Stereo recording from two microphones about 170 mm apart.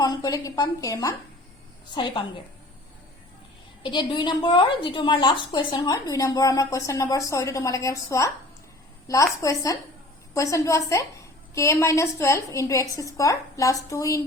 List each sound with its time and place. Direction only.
0.0 s a woman's voice: 20° left (ahead or behind)
3.8 s a woman's voice: 25° left (ahead or behind)